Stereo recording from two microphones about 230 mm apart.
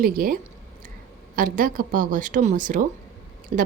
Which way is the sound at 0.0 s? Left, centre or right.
Right.